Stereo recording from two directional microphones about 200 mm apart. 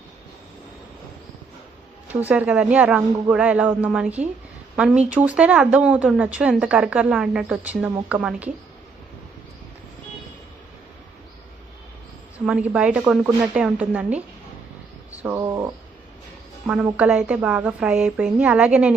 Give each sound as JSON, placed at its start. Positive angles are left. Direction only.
{"t": 2.2, "sound": "a man's voice", "side_deg": -5}
{"t": 12.5, "sound": "speech", "side_deg": -5}
{"t": 17.0, "sound": "a man's voice", "side_deg": -5}